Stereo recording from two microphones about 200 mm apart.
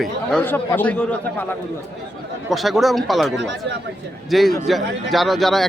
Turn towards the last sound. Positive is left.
turn(degrees=0)  # may be behind; listen again after turning